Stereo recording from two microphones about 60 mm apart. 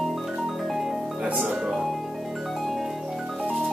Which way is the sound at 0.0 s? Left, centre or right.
Centre.